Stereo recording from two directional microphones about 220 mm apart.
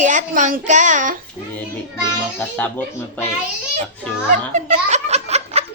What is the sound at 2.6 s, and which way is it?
Speech, 10° left (ahead or behind).